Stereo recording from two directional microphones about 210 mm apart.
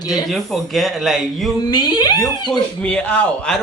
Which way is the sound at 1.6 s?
20° left (ahead or behind).